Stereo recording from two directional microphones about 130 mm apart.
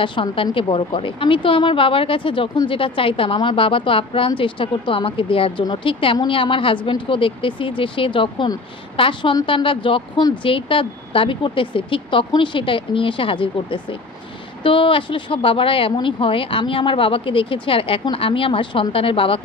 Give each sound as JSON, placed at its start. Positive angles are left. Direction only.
{"t": 0.0, "sound": "a woman's voice", "side_deg": 40}